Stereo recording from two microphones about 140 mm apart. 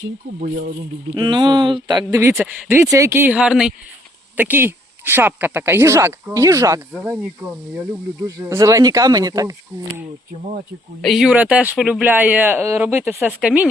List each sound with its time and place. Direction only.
1.1 s speech: 35° right (ahead or behind)
8.2 s speech: 20° right (ahead or behind)
11.0 s speech: centre (ahead or behind)